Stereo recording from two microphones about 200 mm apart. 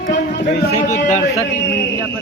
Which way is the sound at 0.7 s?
40° left (ahead or behind).